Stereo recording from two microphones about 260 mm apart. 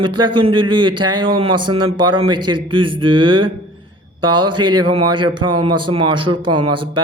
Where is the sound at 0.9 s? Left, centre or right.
Right.